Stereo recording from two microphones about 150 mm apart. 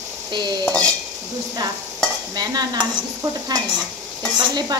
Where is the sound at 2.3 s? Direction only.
25° right (ahead or behind).